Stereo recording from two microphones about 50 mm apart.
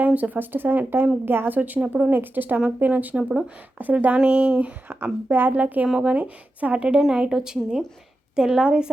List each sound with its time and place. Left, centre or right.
0.0 s a woman's voice: right
1.5 s speech: right
5.0 s speech: right
7.1 s a woman's voice: centre